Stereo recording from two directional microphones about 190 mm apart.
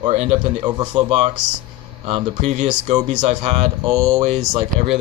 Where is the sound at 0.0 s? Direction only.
35° right (ahead or behind).